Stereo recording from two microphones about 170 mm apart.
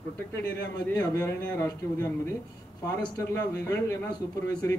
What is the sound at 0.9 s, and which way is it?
A man's voice, 20° left (ahead or behind).